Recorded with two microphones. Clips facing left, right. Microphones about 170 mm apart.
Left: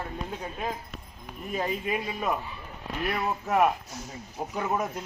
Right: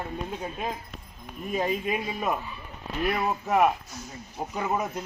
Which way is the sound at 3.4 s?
5° right (ahead or behind).